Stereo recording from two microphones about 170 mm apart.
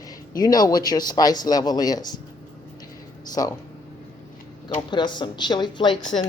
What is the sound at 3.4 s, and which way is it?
Speech, 20° left (ahead or behind).